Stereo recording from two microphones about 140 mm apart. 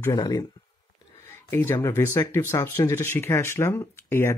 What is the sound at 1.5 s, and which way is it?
Speech, 15° left (ahead or behind).